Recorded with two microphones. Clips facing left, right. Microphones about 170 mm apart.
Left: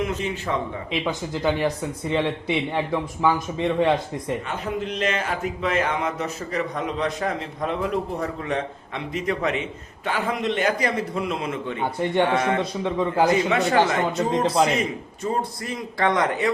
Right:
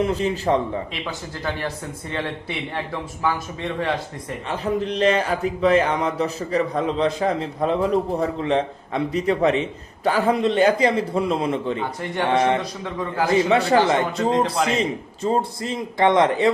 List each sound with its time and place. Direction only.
0.0 s speech: 35° right (ahead or behind)
1.0 s speech: 15° left (ahead or behind)
3.3 s a man's voice: 20° left (ahead or behind)
4.4 s a man's voice: 35° right (ahead or behind)
12.8 s a man's voice: 25° left (ahead or behind)
13.3 s a man's voice: 30° right (ahead or behind)